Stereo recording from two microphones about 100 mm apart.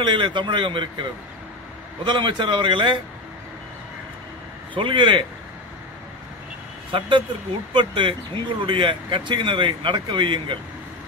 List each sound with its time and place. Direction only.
0.0 s a man's voice: 50° right (ahead or behind)
2.0 s a man's voice: 55° right (ahead or behind)
4.7 s speech: 55° right (ahead or behind)
6.9 s a man's voice: 55° right (ahead or behind)